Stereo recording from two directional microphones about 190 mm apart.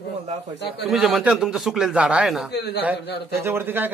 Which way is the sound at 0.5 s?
60° left (ahead or behind).